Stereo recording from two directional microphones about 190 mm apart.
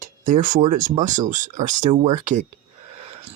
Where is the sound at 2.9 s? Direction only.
30° right (ahead or behind).